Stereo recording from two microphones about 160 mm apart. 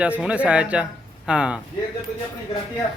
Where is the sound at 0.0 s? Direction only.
5° right (ahead or behind).